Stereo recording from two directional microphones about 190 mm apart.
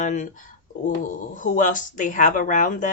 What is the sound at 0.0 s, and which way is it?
Speech, 40° left (ahead or behind).